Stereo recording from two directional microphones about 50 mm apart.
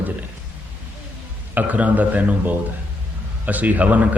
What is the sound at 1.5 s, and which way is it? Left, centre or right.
A man's voice, right.